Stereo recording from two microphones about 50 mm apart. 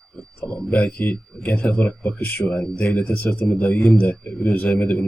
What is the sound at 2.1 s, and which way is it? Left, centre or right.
Speech, left.